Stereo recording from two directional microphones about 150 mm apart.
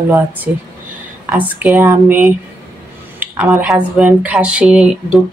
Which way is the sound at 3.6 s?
5° right (ahead or behind).